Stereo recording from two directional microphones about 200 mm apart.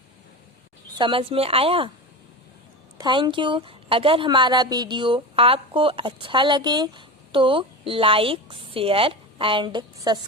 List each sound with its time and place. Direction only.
0.9 s a woman's voice: 25° right (ahead or behind)
3.0 s a woman's voice: 20° right (ahead or behind)